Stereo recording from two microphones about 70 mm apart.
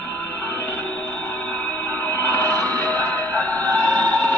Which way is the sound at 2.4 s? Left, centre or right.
Right.